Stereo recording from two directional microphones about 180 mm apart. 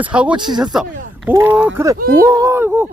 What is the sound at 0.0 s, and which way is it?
Speech, 5° right (ahead or behind).